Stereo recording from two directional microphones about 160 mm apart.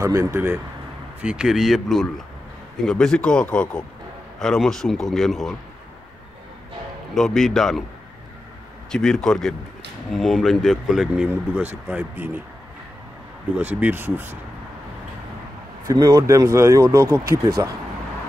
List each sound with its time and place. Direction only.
0.0 s speech: 20° right (ahead or behind); by 5.6 s centre (ahead or behind)
7.2 s speech: centre (ahead or behind)
8.9 s speech: 5° left (ahead or behind)
13.6 s speech: 10° right (ahead or behind)
15.9 s speech: 20° right (ahead or behind)